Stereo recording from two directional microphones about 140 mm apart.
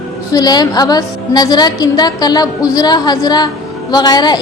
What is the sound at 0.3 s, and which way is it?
A woman's voice, 30° left (ahead or behind).